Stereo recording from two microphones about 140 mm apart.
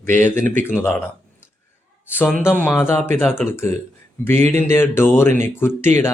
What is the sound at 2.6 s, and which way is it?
Speech, 15° left (ahead or behind).